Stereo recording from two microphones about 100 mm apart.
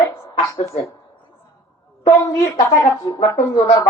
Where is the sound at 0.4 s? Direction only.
35° left (ahead or behind).